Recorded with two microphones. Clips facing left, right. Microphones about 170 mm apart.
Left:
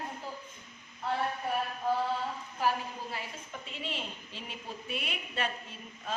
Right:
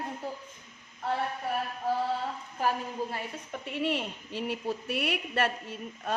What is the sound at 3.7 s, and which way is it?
A woman's voice, 65° right (ahead or behind).